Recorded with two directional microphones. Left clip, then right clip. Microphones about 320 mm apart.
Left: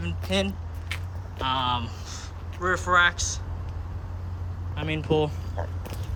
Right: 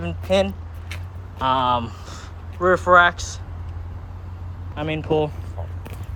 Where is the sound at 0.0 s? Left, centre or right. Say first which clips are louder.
Right 8 dB; centre.